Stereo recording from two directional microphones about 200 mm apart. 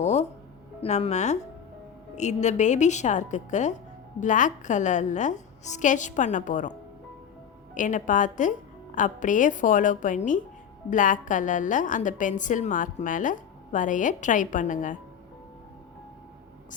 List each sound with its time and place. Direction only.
0.0 s music: 35° left (ahead or behind)
0.8 s a woman's voice: 30° left (ahead or behind)
7.8 s a woman's voice: 40° left (ahead or behind)